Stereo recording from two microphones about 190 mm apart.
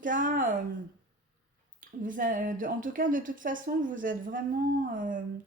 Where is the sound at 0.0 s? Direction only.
45° right (ahead or behind).